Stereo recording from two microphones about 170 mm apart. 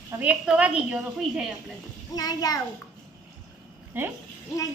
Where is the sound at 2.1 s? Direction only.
20° left (ahead or behind).